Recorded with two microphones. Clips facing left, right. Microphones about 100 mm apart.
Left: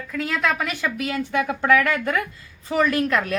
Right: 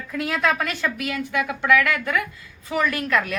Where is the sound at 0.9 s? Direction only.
25° left (ahead or behind).